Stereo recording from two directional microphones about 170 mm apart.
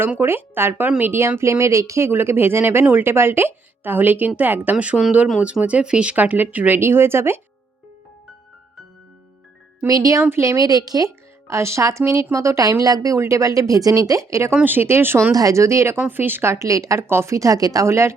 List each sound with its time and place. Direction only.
0.0 s speech: 15° right (ahead or behind)
9.8 s speech: 20° right (ahead or behind)